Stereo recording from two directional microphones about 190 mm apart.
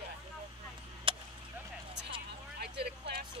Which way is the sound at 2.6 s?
60° right (ahead or behind).